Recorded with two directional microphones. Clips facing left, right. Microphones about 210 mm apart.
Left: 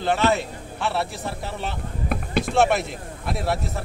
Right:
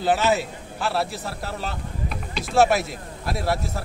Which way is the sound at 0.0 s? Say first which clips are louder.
Even; 5° right (ahead or behind).